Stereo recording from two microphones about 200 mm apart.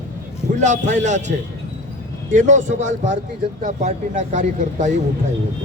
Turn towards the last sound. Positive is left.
turn(degrees=-35)  # may be behind; listen again after turning